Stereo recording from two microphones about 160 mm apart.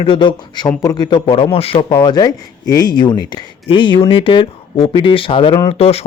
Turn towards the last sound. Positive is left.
turn(degrees=40)  # may be behind; listen again after turning